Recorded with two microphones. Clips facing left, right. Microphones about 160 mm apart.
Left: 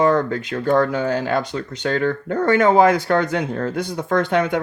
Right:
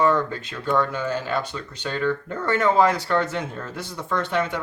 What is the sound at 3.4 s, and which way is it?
Speech, 65° left (ahead or behind).